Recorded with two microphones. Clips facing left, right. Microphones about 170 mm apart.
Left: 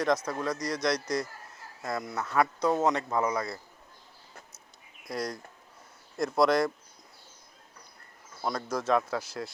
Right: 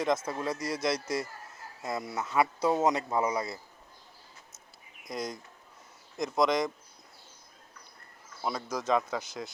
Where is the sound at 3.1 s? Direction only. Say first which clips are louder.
Even; 20° right (ahead or behind).